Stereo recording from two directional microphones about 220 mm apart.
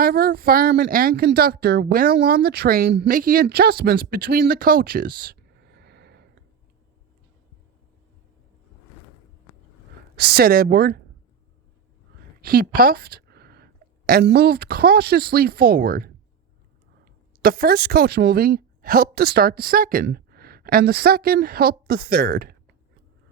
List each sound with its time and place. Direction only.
0.0 s speech: 45° right (ahead or behind)
10.2 s speech: 45° right (ahead or behind)
12.4 s a sound: 45° right (ahead or behind)
14.1 s speech: 45° right (ahead or behind)
17.4 s speech: 40° right (ahead or behind)